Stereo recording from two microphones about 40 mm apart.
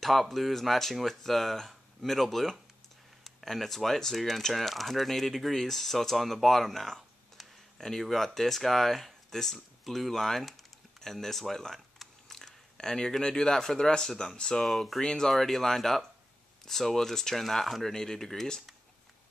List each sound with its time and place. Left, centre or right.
0.0 s speech: centre
12.0 s typing: centre
13.2 s speech: centre
14.7 s speech: centre
15.0 s speech: centre